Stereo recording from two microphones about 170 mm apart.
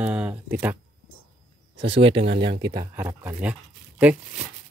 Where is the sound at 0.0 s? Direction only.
5° right (ahead or behind).